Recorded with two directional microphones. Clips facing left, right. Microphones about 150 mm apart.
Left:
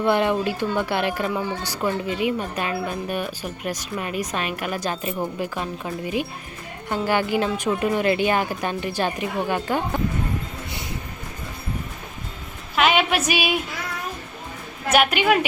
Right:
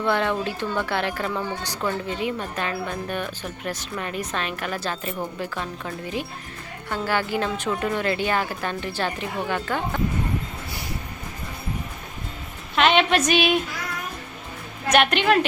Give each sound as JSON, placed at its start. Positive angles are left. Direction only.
{"t": 0.0, "sound": "speech", "side_deg": 15}
{"t": 12.7, "sound": "female singing", "side_deg": 5}
{"t": 14.8, "sound": "speech", "side_deg": 5}